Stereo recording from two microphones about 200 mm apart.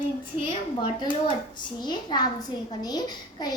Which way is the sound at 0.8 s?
25° left (ahead or behind).